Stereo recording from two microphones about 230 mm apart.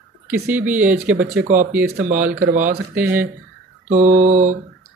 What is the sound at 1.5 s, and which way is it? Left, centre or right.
Mantra, right.